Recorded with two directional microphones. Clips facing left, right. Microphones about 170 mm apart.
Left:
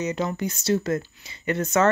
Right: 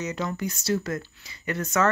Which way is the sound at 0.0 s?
20° left (ahead or behind).